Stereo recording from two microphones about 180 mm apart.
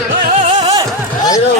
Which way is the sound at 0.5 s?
20° right (ahead or behind).